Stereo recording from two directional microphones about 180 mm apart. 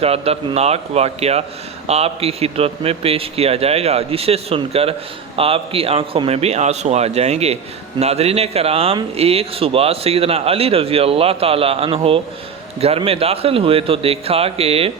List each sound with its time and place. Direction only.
0.0 s a man's voice: 35° right (ahead or behind)